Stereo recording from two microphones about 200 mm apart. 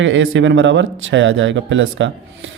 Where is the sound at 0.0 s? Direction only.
70° right (ahead or behind).